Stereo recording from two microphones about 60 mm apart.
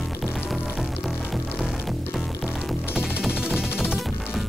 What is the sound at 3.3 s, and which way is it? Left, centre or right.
Music, centre.